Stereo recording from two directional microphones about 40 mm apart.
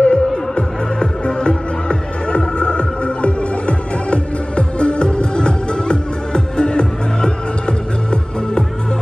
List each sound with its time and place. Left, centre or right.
0.0 s music: left